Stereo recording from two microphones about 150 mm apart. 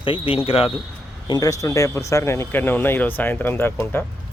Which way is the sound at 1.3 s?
25° left (ahead or behind).